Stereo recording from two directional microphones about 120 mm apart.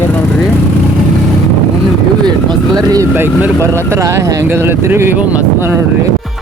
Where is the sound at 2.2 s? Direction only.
35° right (ahead or behind).